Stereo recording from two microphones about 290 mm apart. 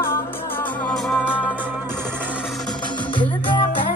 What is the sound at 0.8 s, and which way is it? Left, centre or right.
Music, centre.